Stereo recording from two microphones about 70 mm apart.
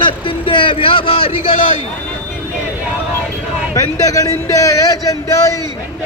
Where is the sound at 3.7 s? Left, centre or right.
Left.